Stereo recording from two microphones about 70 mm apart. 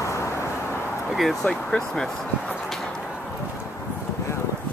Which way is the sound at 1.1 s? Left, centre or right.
Centre.